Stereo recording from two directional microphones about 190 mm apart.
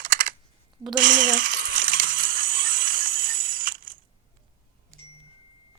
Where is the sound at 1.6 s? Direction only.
45° right (ahead or behind).